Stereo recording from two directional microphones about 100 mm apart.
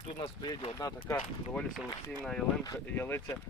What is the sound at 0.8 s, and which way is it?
Speech, 35° left (ahead or behind).